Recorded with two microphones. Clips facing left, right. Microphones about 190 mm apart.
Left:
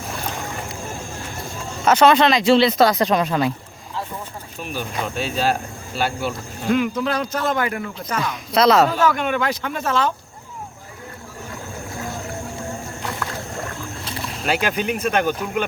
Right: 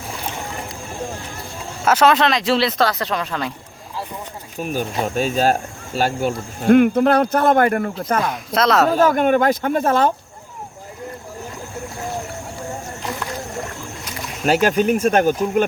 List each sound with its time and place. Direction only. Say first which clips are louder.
1.8 s speech: left 1 dB; 5° right (ahead or behind)
2.8 s speech: left 4 dB; 15° left (ahead or behind)
4.6 s speech: right 5 dB; 45° right (ahead or behind)
8.5 s speech: left 2 dB; centre (ahead or behind)
8.9 s speech: right 5 dB; 50° right (ahead or behind)
14.0 s boat: left 1 dB; 30° left (ahead or behind)
14.4 s speech: right 6 dB; 40° right (ahead or behind)